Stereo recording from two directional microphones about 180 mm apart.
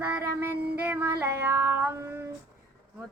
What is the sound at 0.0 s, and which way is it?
Child singing, 10° right (ahead or behind).